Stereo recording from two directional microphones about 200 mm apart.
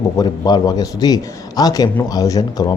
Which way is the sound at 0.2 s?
20° left (ahead or behind).